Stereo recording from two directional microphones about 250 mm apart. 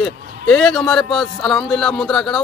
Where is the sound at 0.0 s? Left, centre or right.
Centre.